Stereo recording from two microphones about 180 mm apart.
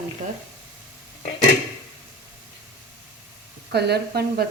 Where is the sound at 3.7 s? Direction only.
65° right (ahead or behind).